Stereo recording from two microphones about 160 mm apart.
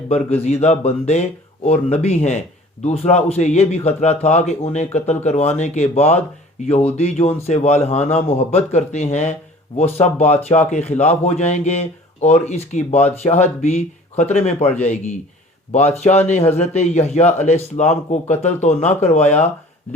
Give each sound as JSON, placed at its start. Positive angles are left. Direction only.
{"t": 0.1, "sound": "a man's voice", "side_deg": 40}